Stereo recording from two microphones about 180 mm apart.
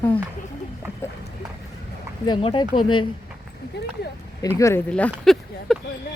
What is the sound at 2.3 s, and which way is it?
Speech, 30° left (ahead or behind).